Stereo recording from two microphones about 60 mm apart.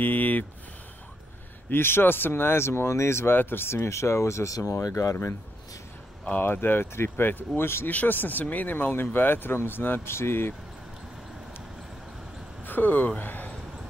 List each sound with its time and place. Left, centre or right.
0.0 s a sound: left
1.7 s speech: left
4.8 s speech: left
6.4 s speech: left
12.6 s speech: left